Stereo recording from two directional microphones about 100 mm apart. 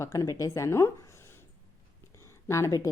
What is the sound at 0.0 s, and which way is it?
Speech, 35° left (ahead or behind).